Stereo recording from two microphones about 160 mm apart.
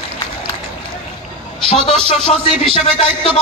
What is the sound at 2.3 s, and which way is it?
Speech, 40° left (ahead or behind).